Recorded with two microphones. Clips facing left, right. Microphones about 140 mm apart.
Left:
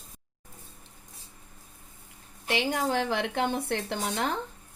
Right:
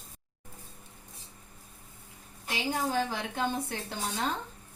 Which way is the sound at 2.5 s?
70° left (ahead or behind).